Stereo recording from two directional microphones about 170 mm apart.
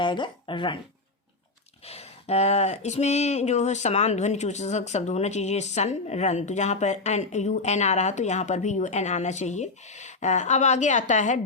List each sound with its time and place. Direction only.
0.0 s speech: 30° left (ahead or behind)
1.9 s speech: 35° left (ahead or behind)